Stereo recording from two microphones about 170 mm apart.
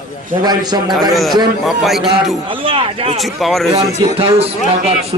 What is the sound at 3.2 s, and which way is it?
Speech, centre (ahead or behind).